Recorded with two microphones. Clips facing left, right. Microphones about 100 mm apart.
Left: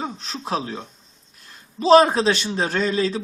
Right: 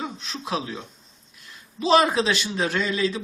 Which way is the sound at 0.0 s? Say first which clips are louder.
Left 2 dB; 35° left (ahead or behind).